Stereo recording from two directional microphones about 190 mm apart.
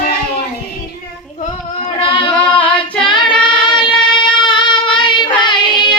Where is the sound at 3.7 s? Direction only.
25° left (ahead or behind).